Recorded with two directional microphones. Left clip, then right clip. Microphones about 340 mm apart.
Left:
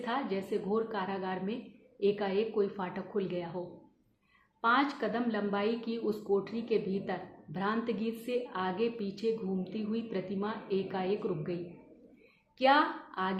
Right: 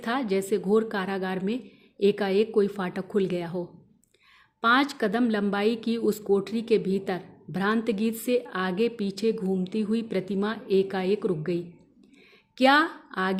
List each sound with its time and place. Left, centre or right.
0.0 s a woman's voice: right
4.6 s a woman's voice: right